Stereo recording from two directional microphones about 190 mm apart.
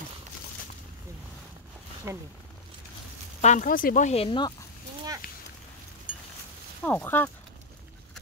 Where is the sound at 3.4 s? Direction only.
40° left (ahead or behind); by 4.7 s 25° left (ahead or behind).